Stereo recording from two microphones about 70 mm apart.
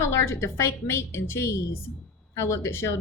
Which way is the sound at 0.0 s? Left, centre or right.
Left.